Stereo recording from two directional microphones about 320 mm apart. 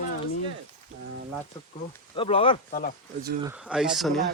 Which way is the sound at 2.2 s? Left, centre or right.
Centre.